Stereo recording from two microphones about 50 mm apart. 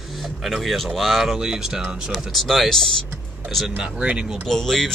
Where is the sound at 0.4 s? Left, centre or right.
Centre.